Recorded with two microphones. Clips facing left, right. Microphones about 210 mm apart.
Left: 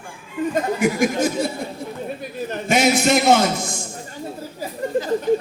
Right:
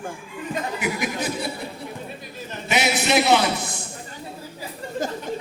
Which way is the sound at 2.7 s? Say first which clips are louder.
Left 4 dB; 45° left (ahead or behind).